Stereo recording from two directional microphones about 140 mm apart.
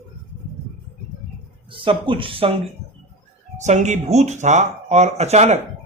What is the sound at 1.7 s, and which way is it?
Speech, 40° right (ahead or behind).